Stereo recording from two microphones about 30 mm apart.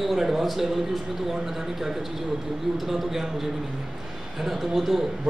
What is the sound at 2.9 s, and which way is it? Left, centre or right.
Speech, centre.